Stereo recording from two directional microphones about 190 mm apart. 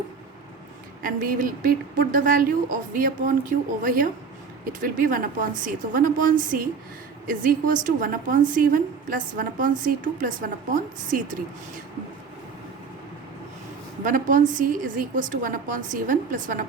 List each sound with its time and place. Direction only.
1.0 s a woman's voice: 45° right (ahead or behind)
14.0 s a woman's voice: 45° right (ahead or behind)